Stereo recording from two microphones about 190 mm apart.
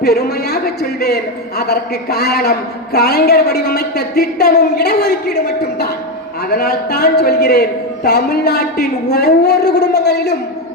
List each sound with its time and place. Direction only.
0.0 s a man's voice: 55° left (ahead or behind)
6.5 s a man's voice: 55° left (ahead or behind)